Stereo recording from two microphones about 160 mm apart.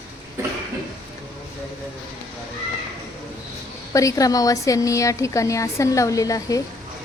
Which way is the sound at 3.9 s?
20° left (ahead or behind).